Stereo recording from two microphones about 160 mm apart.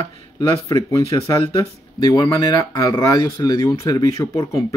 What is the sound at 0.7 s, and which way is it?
Speech, 20° left (ahead or behind).